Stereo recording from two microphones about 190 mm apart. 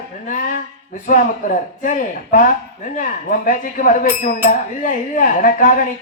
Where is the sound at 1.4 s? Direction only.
45° left (ahead or behind).